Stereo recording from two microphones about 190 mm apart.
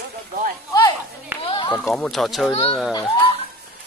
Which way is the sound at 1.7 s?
5° left (ahead or behind).